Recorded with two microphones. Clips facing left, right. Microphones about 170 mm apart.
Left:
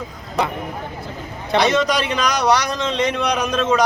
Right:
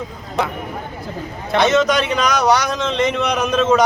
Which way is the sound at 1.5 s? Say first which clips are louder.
Right 2 dB; centre (ahead or behind).